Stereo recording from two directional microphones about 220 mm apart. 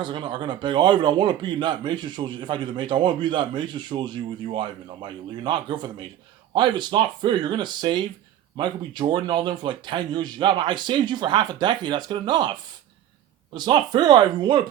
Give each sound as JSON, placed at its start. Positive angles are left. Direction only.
{"t": 0.0, "sound": "a man's voice", "side_deg": -20}